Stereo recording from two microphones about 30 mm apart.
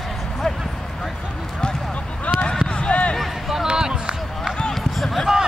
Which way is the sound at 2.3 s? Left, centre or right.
Left.